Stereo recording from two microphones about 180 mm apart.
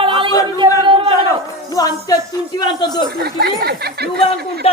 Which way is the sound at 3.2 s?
60° right (ahead or behind).